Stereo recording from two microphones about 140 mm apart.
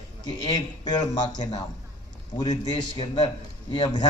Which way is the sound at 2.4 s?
30° left (ahead or behind).